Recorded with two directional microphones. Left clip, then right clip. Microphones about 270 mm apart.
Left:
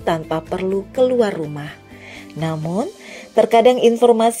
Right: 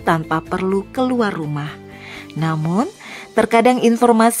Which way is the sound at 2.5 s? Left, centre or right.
Right.